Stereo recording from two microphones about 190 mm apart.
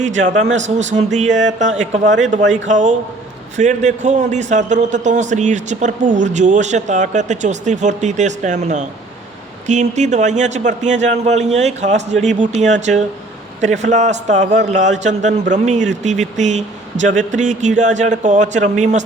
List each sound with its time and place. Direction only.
0.5 s a man's voice: 40° right (ahead or behind)